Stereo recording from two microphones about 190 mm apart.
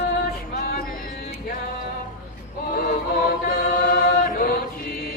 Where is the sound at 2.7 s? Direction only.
45° left (ahead or behind).